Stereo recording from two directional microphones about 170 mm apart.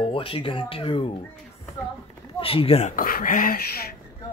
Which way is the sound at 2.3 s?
30° left (ahead or behind).